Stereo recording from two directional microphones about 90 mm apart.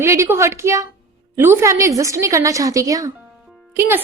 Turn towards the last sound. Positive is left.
turn(degrees=-25)  # may be behind; listen again after turning